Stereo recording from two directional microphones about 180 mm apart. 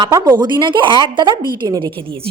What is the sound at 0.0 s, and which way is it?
A woman's voice, 20° right (ahead or behind).